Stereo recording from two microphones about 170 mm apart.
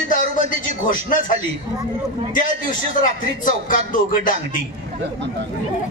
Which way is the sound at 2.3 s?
50° left (ahead or behind).